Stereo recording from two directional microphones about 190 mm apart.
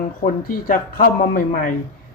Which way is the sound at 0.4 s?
45° left (ahead or behind).